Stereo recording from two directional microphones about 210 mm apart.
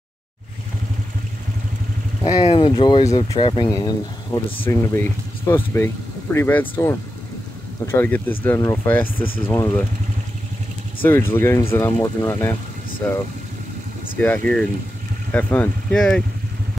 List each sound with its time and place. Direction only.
2.4 s speech: 25° left (ahead or behind)
11.0 s speech: 10° left (ahead or behind)
14.1 s speech: 5° left (ahead or behind)